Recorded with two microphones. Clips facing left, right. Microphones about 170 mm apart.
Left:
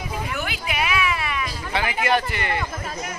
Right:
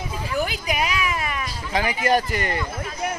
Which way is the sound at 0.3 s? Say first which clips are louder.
Right 4 dB; 40° right (ahead or behind).